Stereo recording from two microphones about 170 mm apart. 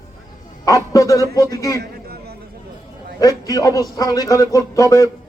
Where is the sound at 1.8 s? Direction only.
65° right (ahead or behind).